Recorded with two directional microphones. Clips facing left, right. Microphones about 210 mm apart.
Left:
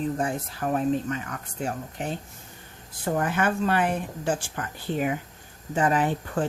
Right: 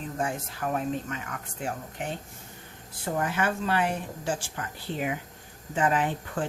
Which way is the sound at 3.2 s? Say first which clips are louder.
Left 3 dB; 50° left (ahead or behind).